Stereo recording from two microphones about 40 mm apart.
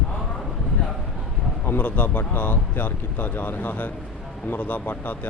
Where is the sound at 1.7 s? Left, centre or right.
Left.